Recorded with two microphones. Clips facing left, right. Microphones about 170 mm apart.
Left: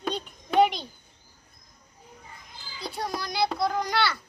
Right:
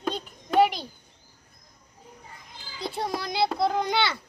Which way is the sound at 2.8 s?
25° right (ahead or behind).